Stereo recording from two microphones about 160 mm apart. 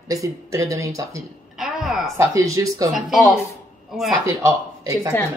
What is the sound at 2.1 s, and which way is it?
Speech, 20° right (ahead or behind).